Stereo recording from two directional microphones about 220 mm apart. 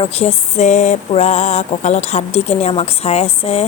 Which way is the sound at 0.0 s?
30° left (ahead or behind).